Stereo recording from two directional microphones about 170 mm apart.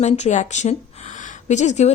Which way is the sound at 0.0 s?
40° left (ahead or behind).